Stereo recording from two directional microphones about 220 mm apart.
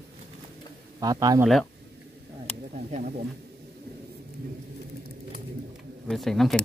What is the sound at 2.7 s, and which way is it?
Speech, 30° right (ahead or behind).